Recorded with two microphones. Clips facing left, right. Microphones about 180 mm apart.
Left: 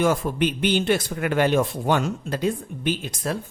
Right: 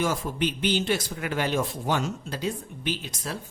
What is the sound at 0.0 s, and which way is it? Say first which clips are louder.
Speech: left 5 dB; 60° left (ahead or behind).